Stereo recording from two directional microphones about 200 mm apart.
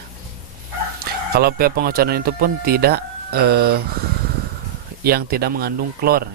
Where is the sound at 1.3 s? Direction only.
50° right (ahead or behind).